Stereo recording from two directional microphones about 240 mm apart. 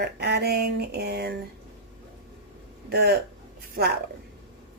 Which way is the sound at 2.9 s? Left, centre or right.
Right.